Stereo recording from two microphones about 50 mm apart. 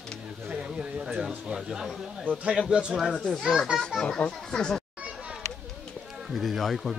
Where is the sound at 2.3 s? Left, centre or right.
Right.